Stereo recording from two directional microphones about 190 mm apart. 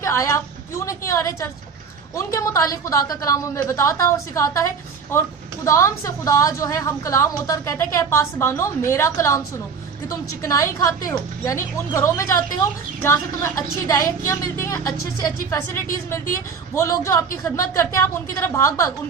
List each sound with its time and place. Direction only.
0.0 s a woman's voice: 15° left (ahead or behind)